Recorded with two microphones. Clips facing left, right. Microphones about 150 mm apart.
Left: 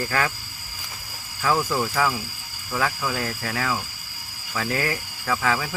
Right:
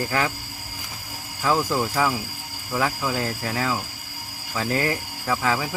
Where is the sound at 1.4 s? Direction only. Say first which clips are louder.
Right 1 dB; 15° right (ahead or behind).